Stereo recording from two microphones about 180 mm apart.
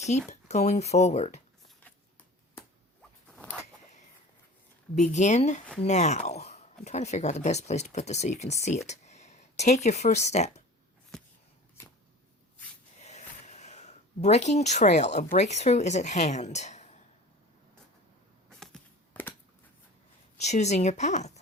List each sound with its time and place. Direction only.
0.3 s speech: 40° left (ahead or behind)
1.8 s shuffling cards: 10° left (ahead or behind)
3.2 s zipper: 5° left (ahead or behind)
4.9 s speech: 40° left (ahead or behind)
11.1 s a sound: 5° left (ahead or behind)
13.0 s speech: 40° left (ahead or behind)
18.4 s a sound: 5° left (ahead or behind)
20.4 s speech: 40° left (ahead or behind)